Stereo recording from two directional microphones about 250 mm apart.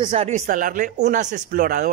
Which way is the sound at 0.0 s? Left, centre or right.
Right.